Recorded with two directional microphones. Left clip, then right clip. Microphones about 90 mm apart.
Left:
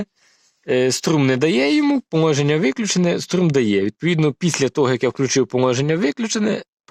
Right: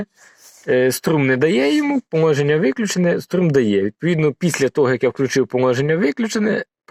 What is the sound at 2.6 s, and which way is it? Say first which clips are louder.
Speech: right 1 dB; 25° left (ahead or behind).